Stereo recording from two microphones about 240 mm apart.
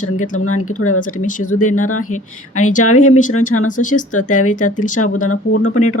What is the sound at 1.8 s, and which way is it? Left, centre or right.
Speech, left.